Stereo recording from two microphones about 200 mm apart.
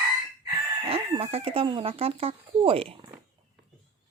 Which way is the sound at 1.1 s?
30° right (ahead or behind).